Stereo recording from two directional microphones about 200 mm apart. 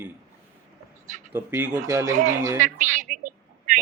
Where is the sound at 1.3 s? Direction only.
10° right (ahead or behind).